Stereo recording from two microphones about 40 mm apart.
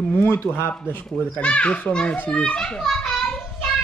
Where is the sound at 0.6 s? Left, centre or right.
Left.